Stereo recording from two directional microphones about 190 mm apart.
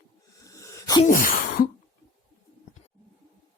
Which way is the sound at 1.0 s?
45° left (ahead or behind).